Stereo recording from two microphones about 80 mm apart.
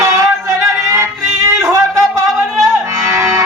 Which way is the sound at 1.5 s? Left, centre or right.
Right.